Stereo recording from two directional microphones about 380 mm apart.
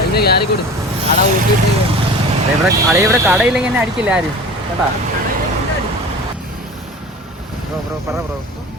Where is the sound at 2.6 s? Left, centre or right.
Centre.